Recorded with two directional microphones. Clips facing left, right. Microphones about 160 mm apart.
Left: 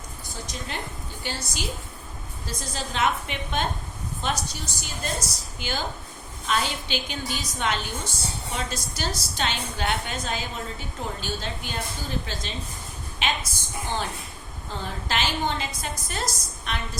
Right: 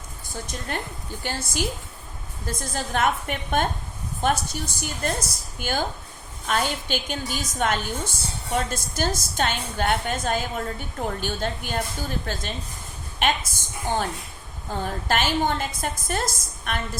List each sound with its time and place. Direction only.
1.2 s a woman's voice: 50° right (ahead or behind)